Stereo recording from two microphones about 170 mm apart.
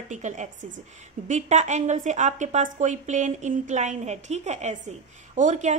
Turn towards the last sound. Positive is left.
turn(degrees=-45)  # may be behind; listen again after turning